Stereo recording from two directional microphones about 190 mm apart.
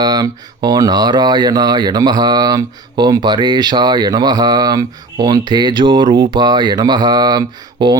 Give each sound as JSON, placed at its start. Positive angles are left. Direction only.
{"t": 0.0, "sound": "speech", "side_deg": -20}